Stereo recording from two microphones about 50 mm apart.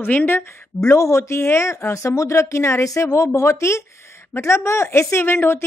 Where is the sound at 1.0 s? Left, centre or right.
Left.